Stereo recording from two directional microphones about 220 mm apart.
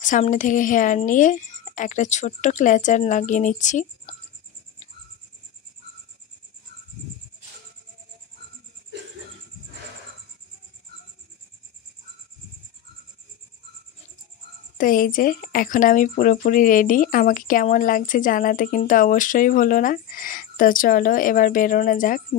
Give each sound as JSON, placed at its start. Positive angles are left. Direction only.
{"t": 0.0, "sound": "a woman's voice", "side_deg": 35}
{"t": 14.8, "sound": "a woman's voice", "side_deg": 40}